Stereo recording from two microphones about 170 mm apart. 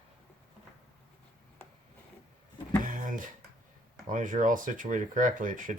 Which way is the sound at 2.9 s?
50° right (ahead or behind).